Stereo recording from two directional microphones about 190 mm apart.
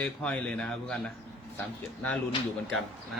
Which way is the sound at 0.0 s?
5° left (ahead or behind).